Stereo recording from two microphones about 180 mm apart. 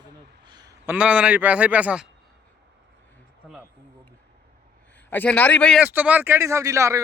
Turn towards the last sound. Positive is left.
turn(degrees=-15)  # may be behind; listen again after turning